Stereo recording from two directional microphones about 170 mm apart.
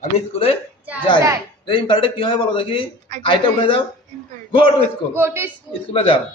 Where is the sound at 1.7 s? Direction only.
30° left (ahead or behind).